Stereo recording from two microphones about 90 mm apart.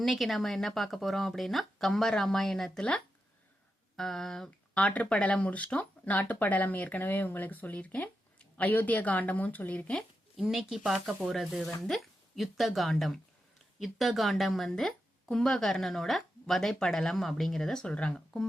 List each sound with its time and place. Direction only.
0.0 s a woman's voice: centre (ahead or behind); by 10.0 s 15° left (ahead or behind)
10.3 s a woman's voice: 5° right (ahead or behind)